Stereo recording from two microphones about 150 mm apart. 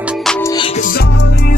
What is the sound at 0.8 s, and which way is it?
Music, 75° left (ahead or behind).